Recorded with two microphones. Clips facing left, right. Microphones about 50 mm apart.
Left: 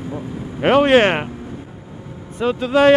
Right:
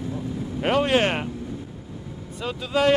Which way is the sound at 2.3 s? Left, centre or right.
Left.